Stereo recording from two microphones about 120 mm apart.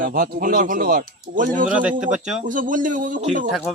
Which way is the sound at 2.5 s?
90° right.